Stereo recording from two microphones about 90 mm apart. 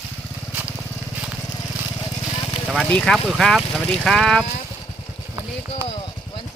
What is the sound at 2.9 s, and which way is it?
Speech, 10° left (ahead or behind).